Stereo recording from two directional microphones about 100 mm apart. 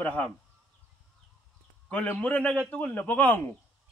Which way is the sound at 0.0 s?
15° left (ahead or behind).